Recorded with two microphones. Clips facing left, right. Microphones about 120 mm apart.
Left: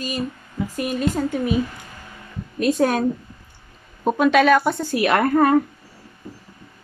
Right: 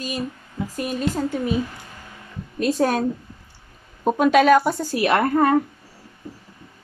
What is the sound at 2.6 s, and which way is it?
Speech, 35° right (ahead or behind).